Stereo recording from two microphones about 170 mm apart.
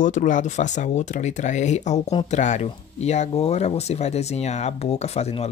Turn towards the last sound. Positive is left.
turn(degrees=40)  # may be behind; listen again after turning